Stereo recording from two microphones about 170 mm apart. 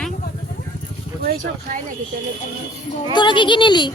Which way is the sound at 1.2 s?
50° right (ahead or behind).